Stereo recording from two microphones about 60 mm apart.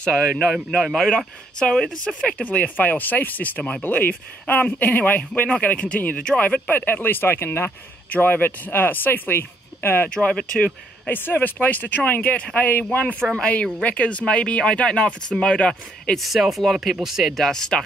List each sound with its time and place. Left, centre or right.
0.0 s speech: centre
2.3 s speech: left
10.0 s speech: centre
10.6 s speech: left
13.4 s speech: left
16.2 s speech: centre